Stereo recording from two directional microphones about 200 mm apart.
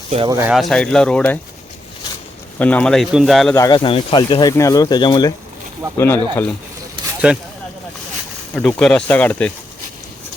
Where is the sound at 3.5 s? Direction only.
20° left (ahead or behind).